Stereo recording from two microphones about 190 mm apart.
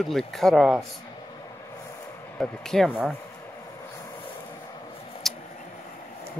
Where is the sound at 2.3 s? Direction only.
Centre (ahead or behind).